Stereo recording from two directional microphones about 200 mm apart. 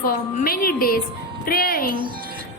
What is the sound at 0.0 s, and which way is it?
A woman's voice, 45° left (ahead or behind).